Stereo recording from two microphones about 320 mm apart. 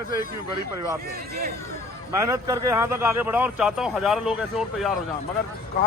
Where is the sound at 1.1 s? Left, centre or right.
Right.